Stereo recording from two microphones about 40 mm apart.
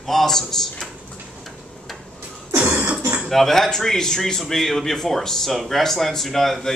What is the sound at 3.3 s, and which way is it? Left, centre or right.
Speech, centre.